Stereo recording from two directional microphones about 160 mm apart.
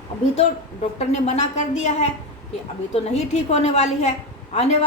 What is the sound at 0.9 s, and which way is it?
Speech, 40° left (ahead or behind).